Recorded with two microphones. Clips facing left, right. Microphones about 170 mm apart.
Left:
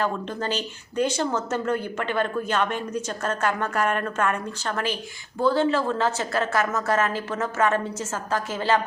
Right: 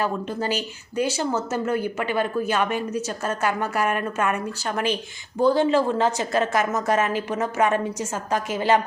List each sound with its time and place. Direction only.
0.0 s speech: 10° right (ahead or behind)